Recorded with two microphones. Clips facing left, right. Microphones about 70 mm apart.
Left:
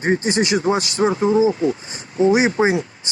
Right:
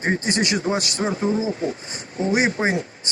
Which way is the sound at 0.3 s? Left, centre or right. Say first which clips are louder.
Left 4 dB; left.